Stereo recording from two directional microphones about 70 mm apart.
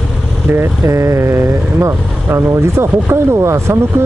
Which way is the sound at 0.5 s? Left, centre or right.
Right.